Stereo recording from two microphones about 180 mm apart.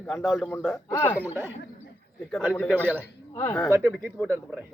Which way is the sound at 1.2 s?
10° right (ahead or behind).